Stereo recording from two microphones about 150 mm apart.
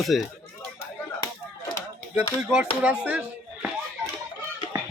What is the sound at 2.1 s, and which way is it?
Speech, 5° right (ahead or behind).